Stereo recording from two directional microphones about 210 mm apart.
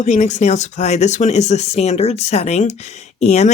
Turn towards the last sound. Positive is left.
turn(degrees=30)  # may be behind; listen again after turning